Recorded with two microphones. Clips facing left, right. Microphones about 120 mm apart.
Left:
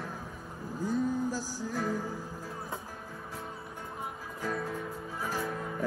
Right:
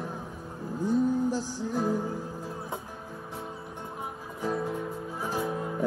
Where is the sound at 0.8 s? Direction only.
25° right (ahead or behind).